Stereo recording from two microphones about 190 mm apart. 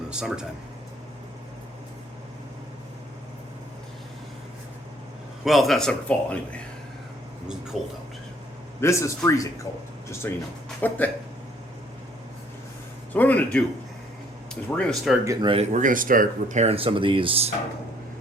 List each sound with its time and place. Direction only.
0.1 s a man's voice: 5° right (ahead or behind)
5.5 s a man's voice: centre (ahead or behind)
8.8 s a man's voice: 15° left (ahead or behind)
13.1 s a man's voice: 10° left (ahead or behind)
15.2 s speech: 15° right (ahead or behind)
15.4 s speech: 35° right (ahead or behind)